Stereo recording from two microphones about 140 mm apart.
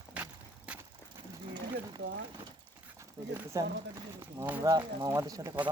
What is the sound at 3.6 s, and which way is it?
Speech, 25° right (ahead or behind).